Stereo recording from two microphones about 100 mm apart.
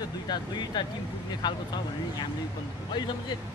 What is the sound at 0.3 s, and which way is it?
Speech, 45° left (ahead or behind).